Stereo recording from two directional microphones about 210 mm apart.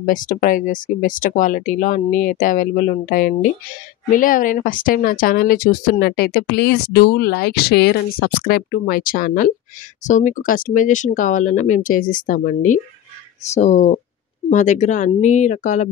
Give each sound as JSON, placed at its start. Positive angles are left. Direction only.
{"t": 0.0, "sound": "speech", "side_deg": 40}